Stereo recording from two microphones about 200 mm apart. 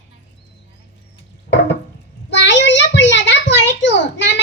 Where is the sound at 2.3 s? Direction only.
60° left (ahead or behind).